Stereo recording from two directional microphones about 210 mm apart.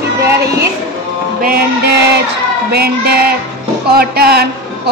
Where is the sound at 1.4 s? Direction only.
50° right (ahead or behind).